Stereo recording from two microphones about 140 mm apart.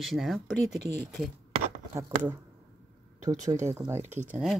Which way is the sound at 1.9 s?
20° right (ahead or behind).